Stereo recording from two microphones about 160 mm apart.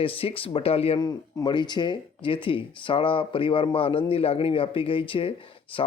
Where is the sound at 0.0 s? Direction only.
35° left (ahead or behind).